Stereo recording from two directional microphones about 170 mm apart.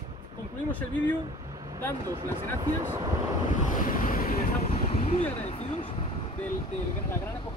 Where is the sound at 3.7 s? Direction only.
55° left (ahead or behind).